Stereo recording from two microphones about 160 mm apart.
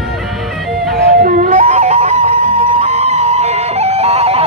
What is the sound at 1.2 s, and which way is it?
Music, 55° right (ahead or behind).